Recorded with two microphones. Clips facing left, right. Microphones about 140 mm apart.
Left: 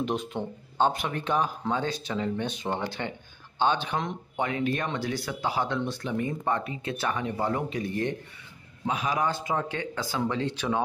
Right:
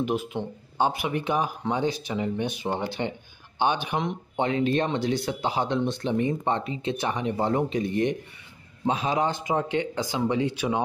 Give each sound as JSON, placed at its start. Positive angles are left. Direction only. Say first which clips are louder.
{"t": 0.0, "sound": "speech", "louder": "right 2 dB", "side_deg": -5}
{"t": 4.4, "sound": "speech", "louder": "right 4 dB", "side_deg": -25}